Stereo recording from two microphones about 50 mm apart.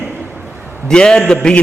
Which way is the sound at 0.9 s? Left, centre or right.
Centre.